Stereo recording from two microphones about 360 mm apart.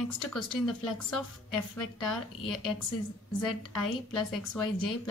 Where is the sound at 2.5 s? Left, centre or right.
Left.